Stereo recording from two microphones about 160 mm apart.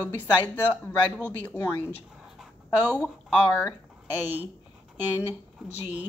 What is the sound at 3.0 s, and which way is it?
Speech, 5° left (ahead or behind).